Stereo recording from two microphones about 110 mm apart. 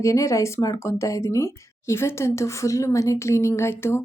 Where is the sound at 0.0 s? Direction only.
30° left (ahead or behind).